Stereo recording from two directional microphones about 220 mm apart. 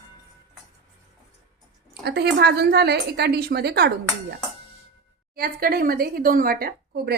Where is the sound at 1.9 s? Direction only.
50° right (ahead or behind).